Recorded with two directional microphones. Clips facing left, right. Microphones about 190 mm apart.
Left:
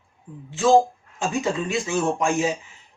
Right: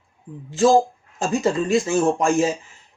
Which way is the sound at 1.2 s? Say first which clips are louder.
Right 4 dB; 40° right (ahead or behind).